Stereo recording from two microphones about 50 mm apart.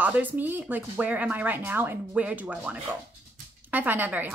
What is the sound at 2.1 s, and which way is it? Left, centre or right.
Speech, right.